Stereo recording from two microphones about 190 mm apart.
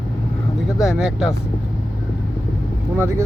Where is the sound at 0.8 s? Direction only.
5° right (ahead or behind).